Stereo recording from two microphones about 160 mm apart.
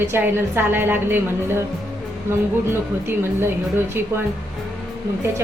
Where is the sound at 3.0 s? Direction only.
15° right (ahead or behind).